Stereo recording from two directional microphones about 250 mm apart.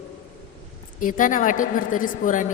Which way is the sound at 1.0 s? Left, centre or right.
Left.